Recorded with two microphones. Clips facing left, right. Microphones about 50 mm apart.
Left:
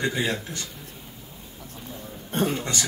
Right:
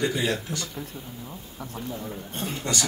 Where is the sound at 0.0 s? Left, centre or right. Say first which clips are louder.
Even; left.